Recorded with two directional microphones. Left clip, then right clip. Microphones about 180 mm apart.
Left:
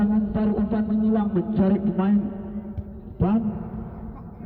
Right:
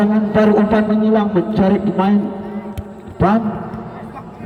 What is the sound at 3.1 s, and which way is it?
Speech, 5° left (ahead or behind).